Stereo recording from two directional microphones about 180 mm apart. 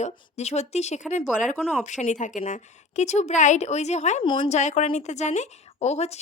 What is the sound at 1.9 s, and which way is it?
Speech, 40° left (ahead or behind).